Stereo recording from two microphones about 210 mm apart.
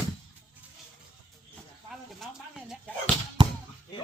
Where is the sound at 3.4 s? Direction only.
20° right (ahead or behind).